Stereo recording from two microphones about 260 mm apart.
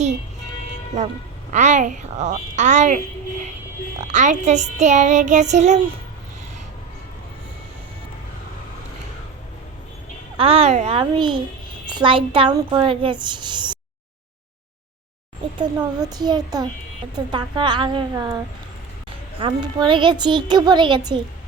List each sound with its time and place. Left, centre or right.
1.5 s a child's voice: right
4.1 s a child's voice: right
10.3 s a child's voice: right
15.5 s speech: centre
19.4 s speech: centre